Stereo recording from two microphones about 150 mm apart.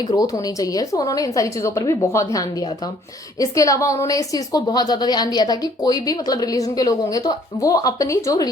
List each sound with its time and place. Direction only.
0.1 s a woman's voice: 25° left (ahead or behind)